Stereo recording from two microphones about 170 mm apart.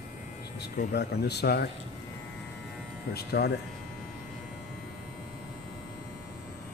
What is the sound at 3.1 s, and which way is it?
Speech, 70° left (ahead or behind).